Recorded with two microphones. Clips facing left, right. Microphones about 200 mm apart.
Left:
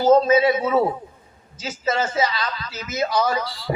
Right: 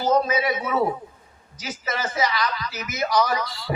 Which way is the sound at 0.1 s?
25° left (ahead or behind).